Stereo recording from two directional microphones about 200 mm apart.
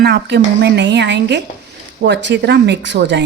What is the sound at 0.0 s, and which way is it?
Speech, 55° right (ahead or behind).